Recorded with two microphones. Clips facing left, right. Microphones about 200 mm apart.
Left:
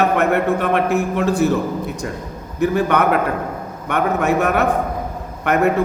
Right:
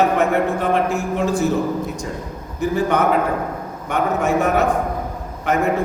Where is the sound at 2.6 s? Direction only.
65° left (ahead or behind).